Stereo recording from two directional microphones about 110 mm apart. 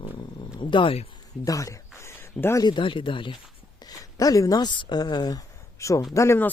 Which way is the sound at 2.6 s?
45° left (ahead or behind).